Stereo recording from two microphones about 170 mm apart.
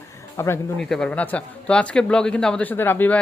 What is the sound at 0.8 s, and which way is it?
Speech, 5° left (ahead or behind).